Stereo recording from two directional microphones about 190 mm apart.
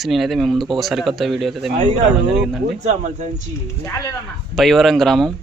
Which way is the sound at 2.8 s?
35° right (ahead or behind).